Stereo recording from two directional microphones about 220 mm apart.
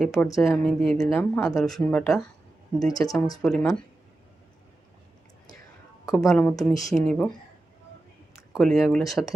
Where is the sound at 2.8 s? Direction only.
15° left (ahead or behind).